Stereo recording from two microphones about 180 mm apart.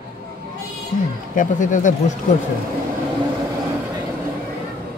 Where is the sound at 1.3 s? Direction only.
45° left (ahead or behind).